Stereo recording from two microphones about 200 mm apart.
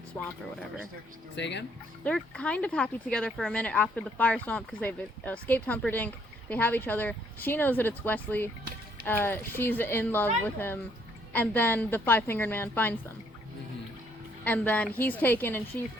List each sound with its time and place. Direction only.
0.1 s speech: 5° left (ahead or behind)
1.4 s speech: 60° left (ahead or behind)
2.0 s speech: 5° left (ahead or behind)
14.4 s speech: 10° left (ahead or behind)